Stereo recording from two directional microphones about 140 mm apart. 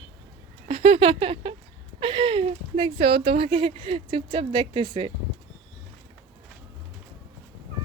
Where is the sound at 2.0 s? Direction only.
40° right (ahead or behind).